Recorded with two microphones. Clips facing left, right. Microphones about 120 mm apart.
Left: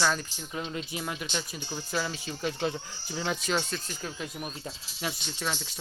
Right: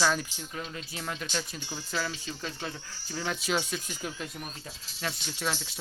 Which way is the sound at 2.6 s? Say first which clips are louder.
Left 8 dB; 20° left (ahead or behind).